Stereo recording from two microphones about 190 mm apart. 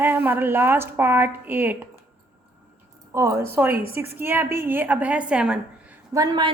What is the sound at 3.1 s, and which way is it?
A woman's voice, 15° right (ahead or behind).